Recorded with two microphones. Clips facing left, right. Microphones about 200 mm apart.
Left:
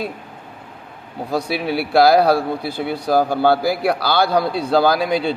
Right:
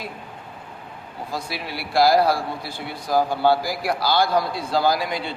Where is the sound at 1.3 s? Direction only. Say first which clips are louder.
Left 10 dB; 65° left (ahead or behind).